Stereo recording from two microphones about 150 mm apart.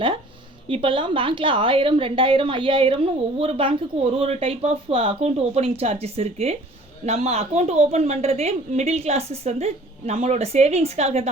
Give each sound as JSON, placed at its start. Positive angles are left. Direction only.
{"t": 0.7, "sound": "a woman's voice", "side_deg": -35}